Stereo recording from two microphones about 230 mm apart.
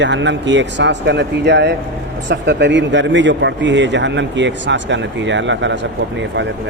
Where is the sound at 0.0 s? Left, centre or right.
Right.